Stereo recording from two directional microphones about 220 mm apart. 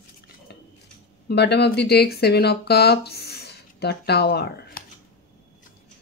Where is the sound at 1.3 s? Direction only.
50° left (ahead or behind).